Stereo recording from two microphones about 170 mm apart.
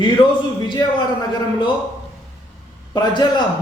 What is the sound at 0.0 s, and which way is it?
A man's voice, 25° left (ahead or behind).